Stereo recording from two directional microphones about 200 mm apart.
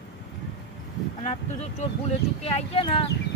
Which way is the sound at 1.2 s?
35° left (ahead or behind).